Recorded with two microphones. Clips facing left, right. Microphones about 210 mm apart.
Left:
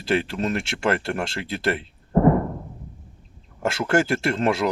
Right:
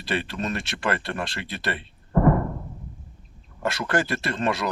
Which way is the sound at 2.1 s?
25° left (ahead or behind).